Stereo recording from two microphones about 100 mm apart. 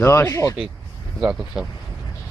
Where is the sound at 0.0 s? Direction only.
25° left (ahead or behind).